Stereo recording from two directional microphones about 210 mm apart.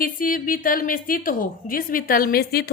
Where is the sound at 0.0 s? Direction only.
40° left (ahead or behind).